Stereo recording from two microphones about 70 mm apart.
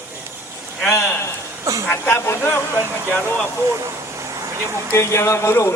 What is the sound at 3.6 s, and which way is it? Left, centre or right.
Vehicle, right.